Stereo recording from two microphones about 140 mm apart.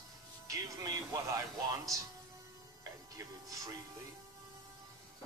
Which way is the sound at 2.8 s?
25° right (ahead or behind).